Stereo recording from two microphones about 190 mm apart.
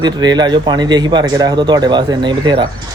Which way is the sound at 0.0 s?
20° right (ahead or behind).